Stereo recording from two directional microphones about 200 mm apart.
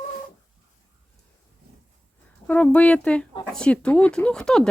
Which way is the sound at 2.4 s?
5° left (ahead or behind).